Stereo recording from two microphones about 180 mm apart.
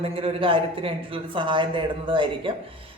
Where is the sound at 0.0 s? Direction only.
30° right (ahead or behind).